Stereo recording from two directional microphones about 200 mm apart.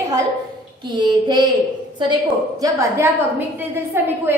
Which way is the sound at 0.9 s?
20° right (ahead or behind).